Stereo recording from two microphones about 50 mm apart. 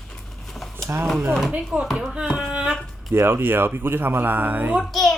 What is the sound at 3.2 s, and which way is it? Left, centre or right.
Speech, right.